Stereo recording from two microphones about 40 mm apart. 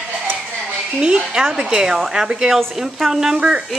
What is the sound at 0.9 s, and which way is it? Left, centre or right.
A woman's voice, right.